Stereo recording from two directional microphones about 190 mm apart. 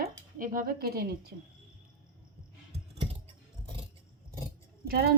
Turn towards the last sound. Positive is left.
turn(degrees=-50)  # may be behind; listen again after turning